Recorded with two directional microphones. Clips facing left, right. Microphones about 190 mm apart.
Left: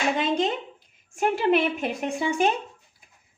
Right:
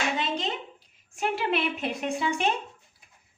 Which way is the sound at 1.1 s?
45° left (ahead or behind).